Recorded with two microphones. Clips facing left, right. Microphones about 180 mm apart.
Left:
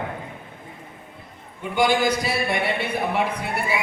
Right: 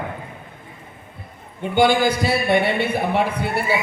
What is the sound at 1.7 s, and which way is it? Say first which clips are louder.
Speech: right 3 dB; 30° right (ahead or behind).